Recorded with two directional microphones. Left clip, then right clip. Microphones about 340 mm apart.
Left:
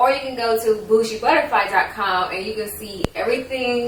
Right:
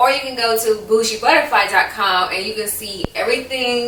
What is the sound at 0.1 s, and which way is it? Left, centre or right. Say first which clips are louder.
A woman's voice: right 2 dB; centre.